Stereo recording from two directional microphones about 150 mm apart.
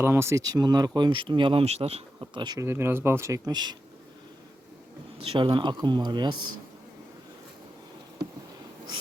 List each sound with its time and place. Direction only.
0.0 s speech: 15° right (ahead or behind); by 2.4 s 40° right (ahead or behind)
2.4 s speech: 30° right (ahead or behind)
2.6 s speech: 15° right (ahead or behind)
5.3 s speech: 35° right (ahead or behind)